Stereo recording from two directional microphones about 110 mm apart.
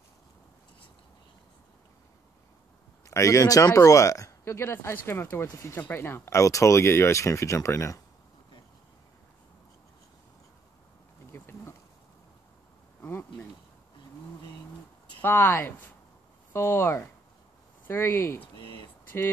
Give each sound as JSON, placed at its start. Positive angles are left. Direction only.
{"t": 3.1, "sound": "speech", "side_deg": 30}
{"t": 11.3, "sound": "bee", "side_deg": 20}
{"t": 13.0, "sound": "insect", "side_deg": 20}
{"t": 15.2, "sound": "speech", "side_deg": 20}
{"t": 18.4, "sound": "a sound", "side_deg": 50}